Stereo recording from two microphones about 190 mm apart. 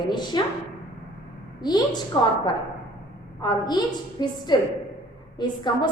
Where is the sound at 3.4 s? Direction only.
20° left (ahead or behind).